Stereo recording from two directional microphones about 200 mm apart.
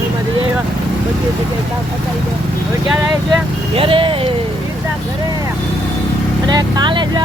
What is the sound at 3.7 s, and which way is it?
Speech, 25° right (ahead or behind).